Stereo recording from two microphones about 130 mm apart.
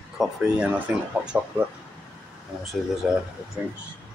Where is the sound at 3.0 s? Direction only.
5° right (ahead or behind).